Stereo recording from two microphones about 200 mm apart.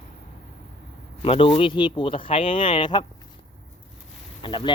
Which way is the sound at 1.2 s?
30° left (ahead or behind).